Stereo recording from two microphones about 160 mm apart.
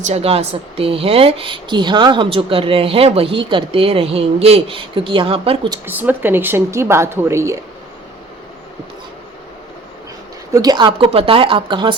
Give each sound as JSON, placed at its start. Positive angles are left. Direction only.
{"t": 0.0, "sound": "speech", "side_deg": -40}
{"t": 5.8, "sound": "speech", "side_deg": -10}
{"t": 10.5, "sound": "speech", "side_deg": -25}